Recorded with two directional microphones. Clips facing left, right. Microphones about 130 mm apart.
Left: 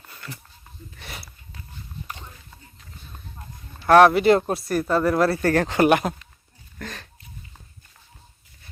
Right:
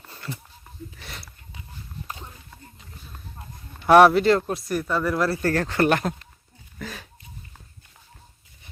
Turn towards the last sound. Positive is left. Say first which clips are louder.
# even
turn(degrees=-5)  # may be behind; listen again after turning